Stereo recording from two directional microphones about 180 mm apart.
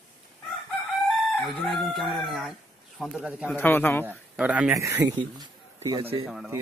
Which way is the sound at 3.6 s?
10° left (ahead or behind).